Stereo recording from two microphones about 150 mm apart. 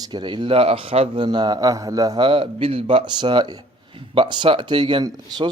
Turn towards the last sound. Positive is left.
turn(degrees=-30)  # may be behind; listen again after turning